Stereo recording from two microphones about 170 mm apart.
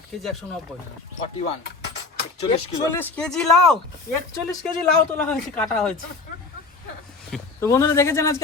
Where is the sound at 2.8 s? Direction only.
15° left (ahead or behind).